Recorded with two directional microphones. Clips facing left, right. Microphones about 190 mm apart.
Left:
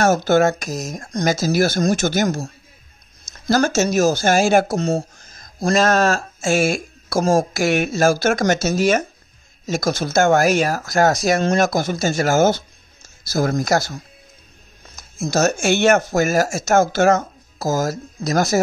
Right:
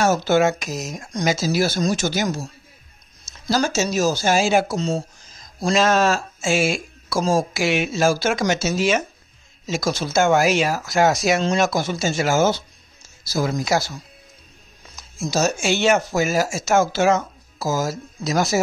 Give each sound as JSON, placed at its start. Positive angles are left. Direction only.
{"t": 0.0, "sound": "speech", "side_deg": 45}